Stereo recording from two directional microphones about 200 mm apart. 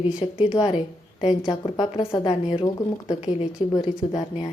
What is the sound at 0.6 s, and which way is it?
A woman's voice, 30° left (ahead or behind).